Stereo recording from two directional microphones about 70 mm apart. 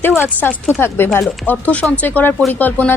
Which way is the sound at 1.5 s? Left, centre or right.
Left.